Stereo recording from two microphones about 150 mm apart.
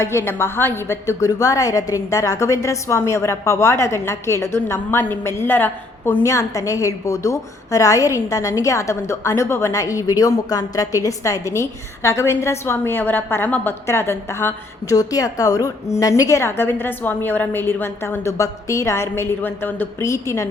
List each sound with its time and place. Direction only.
0.0 s a woman's voice: 15° left (ahead or behind)